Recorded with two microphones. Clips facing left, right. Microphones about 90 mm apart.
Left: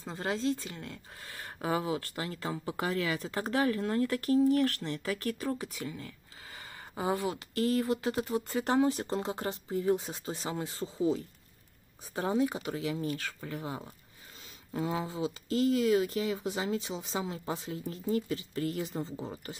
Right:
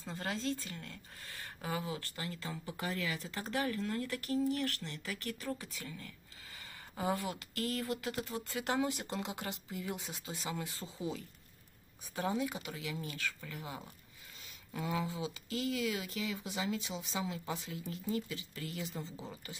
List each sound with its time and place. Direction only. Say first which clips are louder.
0.0 s speech: left 6 dB; 30° left (ahead or behind)
1.6 s speech: left 8 dB; 75° left (ahead or behind); by 5.3 s 50° left (ahead or behind)
5.6 s speech: left 8 dB; 20° left (ahead or behind)